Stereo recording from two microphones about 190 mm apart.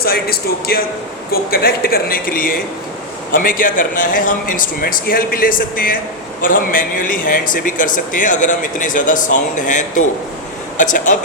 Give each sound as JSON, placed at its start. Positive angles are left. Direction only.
{"t": 0.0, "sound": "a man's voice", "side_deg": 55}